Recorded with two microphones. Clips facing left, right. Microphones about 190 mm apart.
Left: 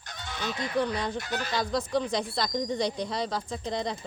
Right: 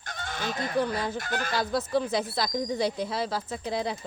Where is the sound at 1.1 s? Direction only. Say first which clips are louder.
Right 1 dB; 50° right (ahead or behind).